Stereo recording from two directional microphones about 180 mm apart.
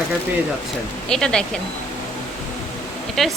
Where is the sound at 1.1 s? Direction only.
5° left (ahead or behind).